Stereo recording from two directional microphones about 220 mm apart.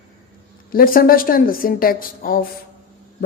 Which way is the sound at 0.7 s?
40° left (ahead or behind).